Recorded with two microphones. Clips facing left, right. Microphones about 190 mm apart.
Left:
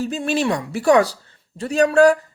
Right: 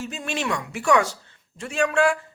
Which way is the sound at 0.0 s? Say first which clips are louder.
Left 8 dB; 35° left (ahead or behind).